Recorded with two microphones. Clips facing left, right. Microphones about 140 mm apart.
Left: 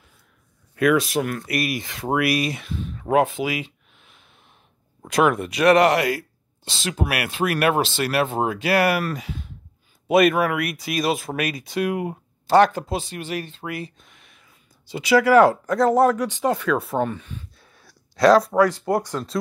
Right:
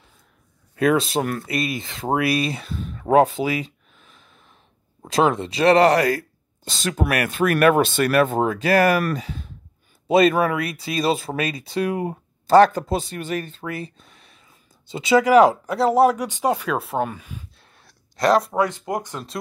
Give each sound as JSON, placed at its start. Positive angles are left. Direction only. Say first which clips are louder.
{"t": 0.7, "sound": "speech", "louder": "even", "side_deg": -30}
{"t": 5.0, "sound": "speech", "louder": "even", "side_deg": -30}
{"t": 14.9, "sound": "speech", "louder": "even", "side_deg": -25}
{"t": 17.6, "sound": "a sound", "louder": "left 2 dB", "side_deg": 0}
{"t": 19.0, "sound": "speech", "louder": "left 5 dB", "side_deg": 0}